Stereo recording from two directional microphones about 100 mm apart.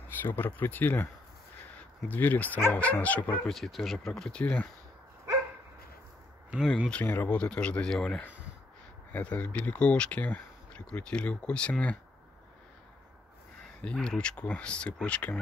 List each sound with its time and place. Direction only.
0.2 s speech: 20° left (ahead or behind)
2.0 s speech: 20° left (ahead or behind)
3.4 s speech: centre (ahead or behind)
6.5 s speech: 10° right (ahead or behind)
6.9 s speech: 15° left (ahead or behind)
13.7 s speech: 10° left (ahead or behind)